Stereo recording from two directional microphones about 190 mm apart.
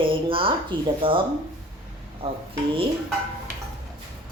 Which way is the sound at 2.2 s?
30° right (ahead or behind).